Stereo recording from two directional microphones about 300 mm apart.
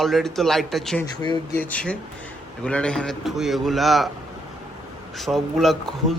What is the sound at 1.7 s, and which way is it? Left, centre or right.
Speech, centre.